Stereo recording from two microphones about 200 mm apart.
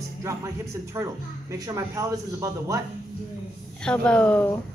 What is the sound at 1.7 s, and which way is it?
A man's voice, 15° right (ahead or behind).